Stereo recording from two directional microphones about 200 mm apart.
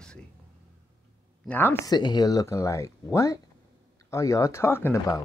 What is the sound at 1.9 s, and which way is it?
Speech, 20° left (ahead or behind).